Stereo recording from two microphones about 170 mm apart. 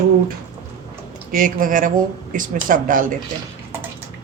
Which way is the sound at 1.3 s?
55° right (ahead or behind).